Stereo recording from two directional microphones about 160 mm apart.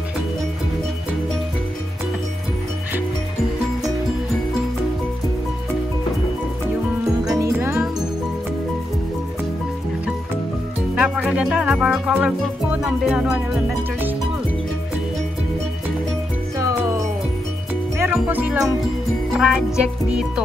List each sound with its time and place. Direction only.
7.2 s music: 20° right (ahead or behind)
11.0 s speech: 5° right (ahead or behind)
12.8 s music: 5° right (ahead or behind)
16.5 s music: 20° right (ahead or behind)